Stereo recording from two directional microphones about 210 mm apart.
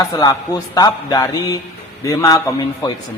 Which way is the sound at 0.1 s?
15° left (ahead or behind).